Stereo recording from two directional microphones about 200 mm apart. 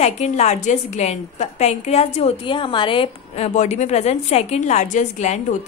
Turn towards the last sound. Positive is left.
turn(degrees=35)  # may be behind; listen again after turning